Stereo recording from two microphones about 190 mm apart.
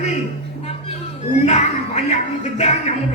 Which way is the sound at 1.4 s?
35° left (ahead or behind).